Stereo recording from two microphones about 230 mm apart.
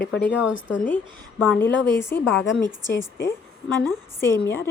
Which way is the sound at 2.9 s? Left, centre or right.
Centre.